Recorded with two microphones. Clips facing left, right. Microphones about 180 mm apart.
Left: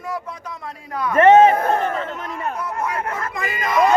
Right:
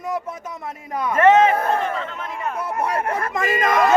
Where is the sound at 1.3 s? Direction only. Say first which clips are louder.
Left 7 dB; 35° left (ahead or behind).